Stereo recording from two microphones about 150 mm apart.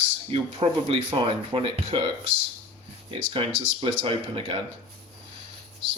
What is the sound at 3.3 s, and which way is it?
Speech, 35° right (ahead or behind).